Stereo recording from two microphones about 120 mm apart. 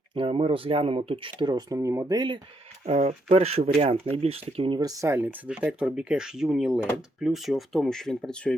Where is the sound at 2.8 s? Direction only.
60° right (ahead or behind).